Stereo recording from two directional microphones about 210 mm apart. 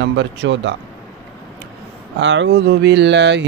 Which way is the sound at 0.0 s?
60° right (ahead or behind).